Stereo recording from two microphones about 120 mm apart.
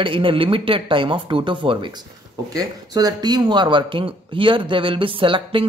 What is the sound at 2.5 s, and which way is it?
Speech, 30° right (ahead or behind).